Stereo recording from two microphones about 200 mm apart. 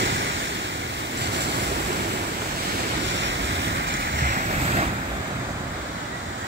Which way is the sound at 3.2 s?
65° right (ahead or behind).